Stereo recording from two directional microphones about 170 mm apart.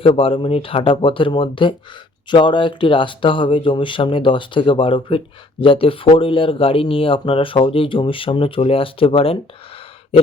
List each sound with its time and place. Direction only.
0.0 s speech: 30° left (ahead or behind)